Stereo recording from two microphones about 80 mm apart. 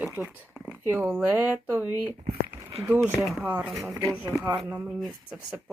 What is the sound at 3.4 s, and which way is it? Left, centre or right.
Speech, centre.